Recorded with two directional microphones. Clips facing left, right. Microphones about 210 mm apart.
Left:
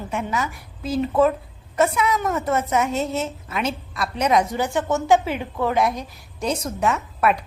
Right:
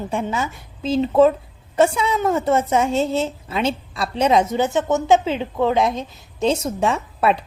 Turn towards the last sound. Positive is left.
turn(degrees=-25)  # may be behind; listen again after turning